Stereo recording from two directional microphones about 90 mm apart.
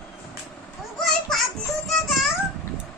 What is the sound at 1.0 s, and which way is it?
Children playing, centre (ahead or behind).